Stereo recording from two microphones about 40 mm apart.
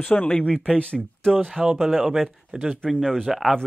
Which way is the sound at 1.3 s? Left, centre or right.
Centre.